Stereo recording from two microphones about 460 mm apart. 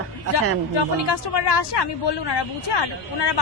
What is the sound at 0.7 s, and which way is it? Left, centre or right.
Speech, left.